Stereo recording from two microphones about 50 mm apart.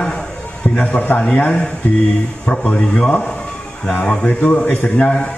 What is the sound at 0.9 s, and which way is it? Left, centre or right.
Speech, left.